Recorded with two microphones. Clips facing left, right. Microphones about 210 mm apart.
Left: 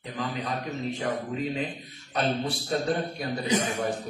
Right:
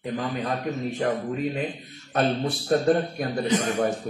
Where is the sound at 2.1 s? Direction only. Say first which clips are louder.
Right 4 dB; 50° right (ahead or behind).